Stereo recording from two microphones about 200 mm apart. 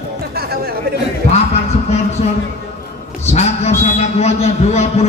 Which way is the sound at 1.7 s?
30° left (ahead or behind).